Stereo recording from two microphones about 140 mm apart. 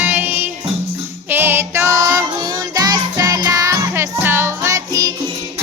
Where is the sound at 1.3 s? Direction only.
15° right (ahead or behind).